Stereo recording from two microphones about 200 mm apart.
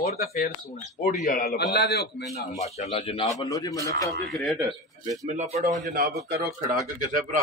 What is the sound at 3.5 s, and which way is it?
Speech, 15° left (ahead or behind).